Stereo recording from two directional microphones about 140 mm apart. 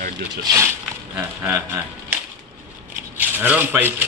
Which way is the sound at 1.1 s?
15° right (ahead or behind).